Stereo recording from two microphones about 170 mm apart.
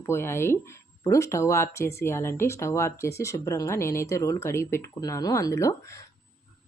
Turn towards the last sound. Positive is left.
turn(degrees=15)  # may be behind; listen again after turning